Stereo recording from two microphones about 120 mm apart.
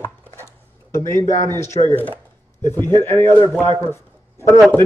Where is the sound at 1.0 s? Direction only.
25° left (ahead or behind).